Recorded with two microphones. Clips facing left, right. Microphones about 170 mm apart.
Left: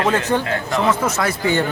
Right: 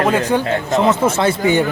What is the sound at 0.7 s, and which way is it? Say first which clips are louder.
Speech: right 4 dB; 25° right (ahead or behind).